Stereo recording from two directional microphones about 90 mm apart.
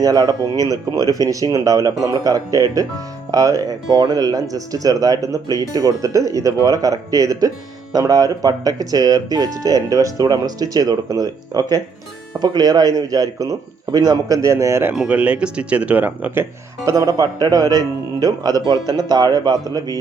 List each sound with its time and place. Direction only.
0.0 s speech: 45° right (ahead or behind)
14.9 s speech: 15° right (ahead or behind)
16.9 s speech: 45° right (ahead or behind)